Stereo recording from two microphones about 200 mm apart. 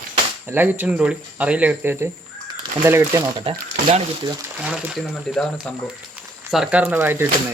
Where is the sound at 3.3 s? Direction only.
30° right (ahead or behind).